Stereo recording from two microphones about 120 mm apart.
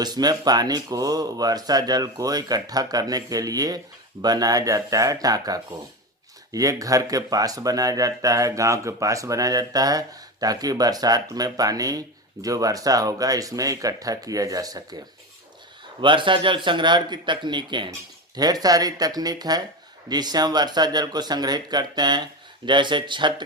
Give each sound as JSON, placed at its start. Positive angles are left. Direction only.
{"t": 0.0, "sound": "speech", "side_deg": -35}
{"t": 16.0, "sound": "speech", "side_deg": -45}